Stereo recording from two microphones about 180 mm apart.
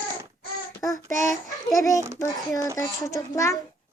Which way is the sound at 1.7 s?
15° left (ahead or behind).